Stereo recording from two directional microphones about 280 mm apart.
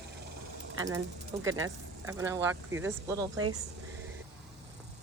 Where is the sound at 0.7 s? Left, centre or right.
Centre.